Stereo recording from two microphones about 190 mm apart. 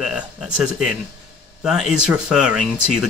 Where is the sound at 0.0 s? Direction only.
5° right (ahead or behind).